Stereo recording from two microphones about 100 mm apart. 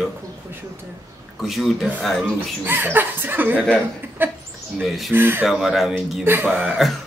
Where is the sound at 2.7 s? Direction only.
20° right (ahead or behind).